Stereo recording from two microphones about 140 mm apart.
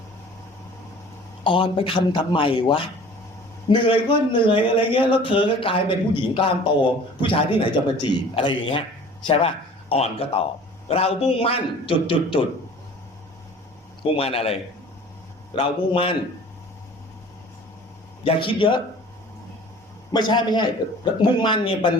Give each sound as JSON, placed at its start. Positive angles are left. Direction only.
{"t": 1.5, "sound": "a man's voice", "side_deg": 35}
{"t": 14.0, "sound": "a man's voice", "side_deg": 40}
{"t": 18.2, "sound": "speech", "side_deg": 40}
{"t": 20.1, "sound": "speech", "side_deg": 30}